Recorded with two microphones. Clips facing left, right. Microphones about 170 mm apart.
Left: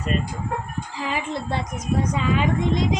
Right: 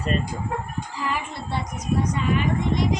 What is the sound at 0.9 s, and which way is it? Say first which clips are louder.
Speech: left 3 dB; 90° left.